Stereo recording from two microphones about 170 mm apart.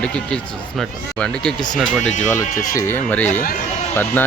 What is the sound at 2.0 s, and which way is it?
Speech, 45° left (ahead or behind).